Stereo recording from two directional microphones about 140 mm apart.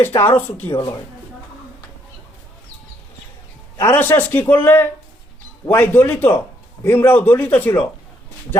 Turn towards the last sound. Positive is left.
turn(degrees=10)  # may be behind; listen again after turning